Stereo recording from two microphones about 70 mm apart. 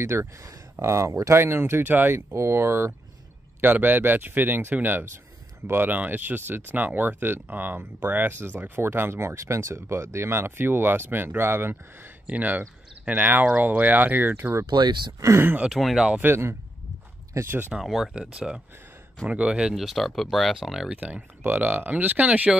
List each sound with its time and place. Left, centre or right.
0.0 s speech: right
2.3 s speech: right
3.6 s speech: right
14.7 s speech: right
15.2 s speech: right
15.7 s speech: centre
16.2 s speech: right
17.7 s speech: centre
19.7 s speech: centre
20.9 s speech: right